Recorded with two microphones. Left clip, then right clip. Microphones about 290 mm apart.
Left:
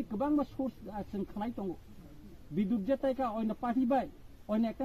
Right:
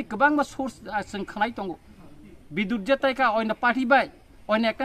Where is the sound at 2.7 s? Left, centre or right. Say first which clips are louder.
Right 9 dB; right.